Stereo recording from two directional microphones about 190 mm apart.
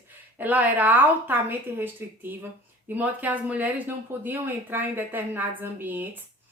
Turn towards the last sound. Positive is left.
turn(degrees=-10)  # may be behind; listen again after turning